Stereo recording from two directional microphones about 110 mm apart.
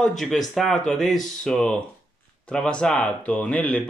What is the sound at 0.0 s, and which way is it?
Speech, centre (ahead or behind).